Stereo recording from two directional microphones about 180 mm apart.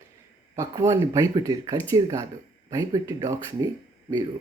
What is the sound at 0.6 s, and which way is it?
A man's voice, 15° right (ahead or behind).